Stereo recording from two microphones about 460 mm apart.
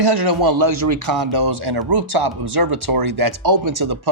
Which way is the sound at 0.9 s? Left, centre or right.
Right.